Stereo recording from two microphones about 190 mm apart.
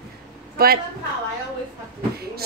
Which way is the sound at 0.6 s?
50° right (ahead or behind).